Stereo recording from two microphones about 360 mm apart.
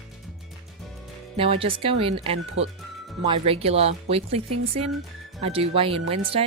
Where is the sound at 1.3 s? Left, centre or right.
Centre.